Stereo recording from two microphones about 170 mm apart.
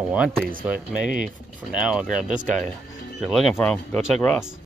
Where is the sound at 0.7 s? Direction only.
55° right (ahead or behind).